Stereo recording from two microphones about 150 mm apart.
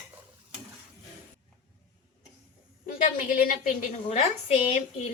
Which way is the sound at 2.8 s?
70° left (ahead or behind).